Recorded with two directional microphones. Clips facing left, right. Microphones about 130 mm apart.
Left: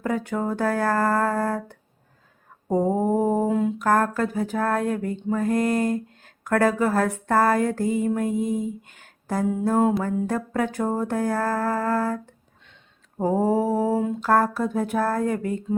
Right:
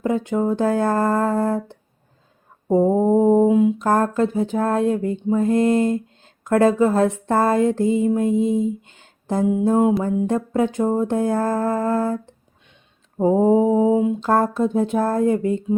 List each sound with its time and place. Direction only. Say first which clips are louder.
0.0 s speech: right 5 dB; 20° right (ahead or behind)
3.8 s speech: right 3 dB; 25° right (ahead or behind)